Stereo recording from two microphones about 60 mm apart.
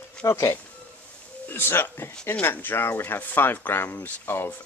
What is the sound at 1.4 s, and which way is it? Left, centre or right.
Speech, left.